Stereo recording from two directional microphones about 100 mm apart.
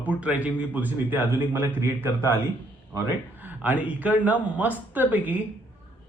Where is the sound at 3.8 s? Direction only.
15° right (ahead or behind).